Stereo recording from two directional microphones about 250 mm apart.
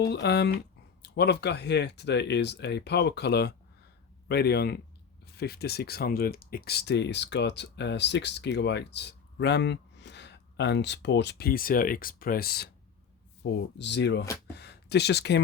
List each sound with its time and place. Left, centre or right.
0.1 s speech: left